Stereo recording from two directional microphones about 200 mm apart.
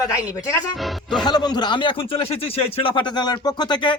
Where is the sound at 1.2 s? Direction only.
20° left (ahead or behind).